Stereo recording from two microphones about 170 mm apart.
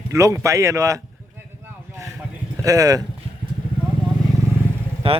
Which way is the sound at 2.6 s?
20° right (ahead or behind).